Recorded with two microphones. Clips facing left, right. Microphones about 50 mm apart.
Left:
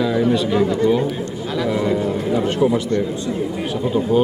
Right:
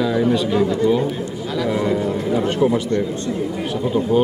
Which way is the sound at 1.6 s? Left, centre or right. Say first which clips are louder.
Even; centre.